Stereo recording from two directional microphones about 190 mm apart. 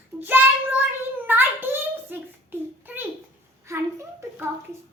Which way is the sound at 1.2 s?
10° right (ahead or behind).